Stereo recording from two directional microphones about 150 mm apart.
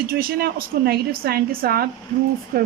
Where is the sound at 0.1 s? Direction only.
80° right.